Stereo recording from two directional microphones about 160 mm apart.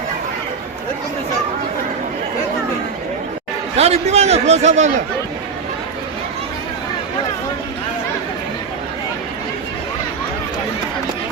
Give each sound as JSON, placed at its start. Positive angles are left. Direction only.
{"t": 3.8, "sound": "a man's voice", "side_deg": -40}